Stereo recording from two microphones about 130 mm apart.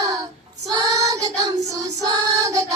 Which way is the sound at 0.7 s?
25° right (ahead or behind).